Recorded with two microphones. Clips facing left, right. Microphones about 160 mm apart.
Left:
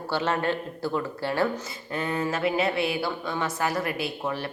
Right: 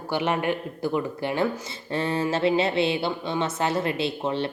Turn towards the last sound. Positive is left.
turn(degrees=-25)  # may be behind; listen again after turning